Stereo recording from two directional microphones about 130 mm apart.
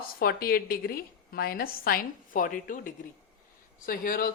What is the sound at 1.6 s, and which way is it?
Speech, 90° left.